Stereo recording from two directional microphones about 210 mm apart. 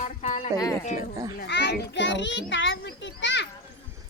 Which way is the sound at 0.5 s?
15° left (ahead or behind).